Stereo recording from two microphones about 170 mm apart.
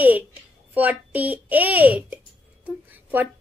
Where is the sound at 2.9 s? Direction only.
10° right (ahead or behind).